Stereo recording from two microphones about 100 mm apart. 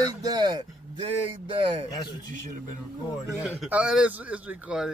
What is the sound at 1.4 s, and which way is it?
Speech, 70° right (ahead or behind).